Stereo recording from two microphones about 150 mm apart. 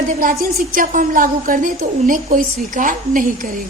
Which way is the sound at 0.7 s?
65° right (ahead or behind).